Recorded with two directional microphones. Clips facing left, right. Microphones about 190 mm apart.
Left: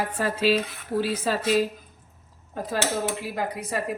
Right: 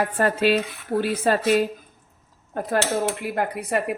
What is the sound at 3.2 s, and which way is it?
Speech, 60° right (ahead or behind).